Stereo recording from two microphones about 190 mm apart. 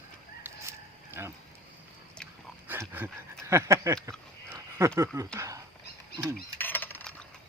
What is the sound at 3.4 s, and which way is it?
Speech, 15° right (ahead or behind).